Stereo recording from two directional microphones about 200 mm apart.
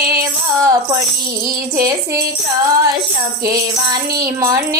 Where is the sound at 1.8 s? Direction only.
20° right (ahead or behind).